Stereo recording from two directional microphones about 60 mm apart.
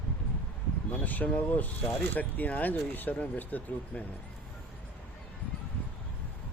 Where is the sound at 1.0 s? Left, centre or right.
Left.